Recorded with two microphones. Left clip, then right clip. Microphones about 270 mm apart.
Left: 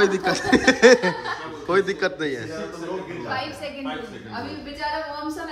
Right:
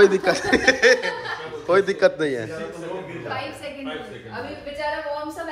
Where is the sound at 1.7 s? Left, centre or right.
Centre.